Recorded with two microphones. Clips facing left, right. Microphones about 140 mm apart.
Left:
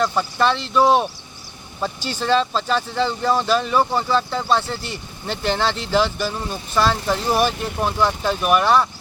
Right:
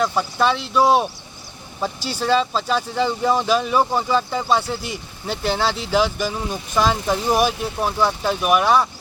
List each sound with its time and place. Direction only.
0.0 s speech: 5° right (ahead or behind)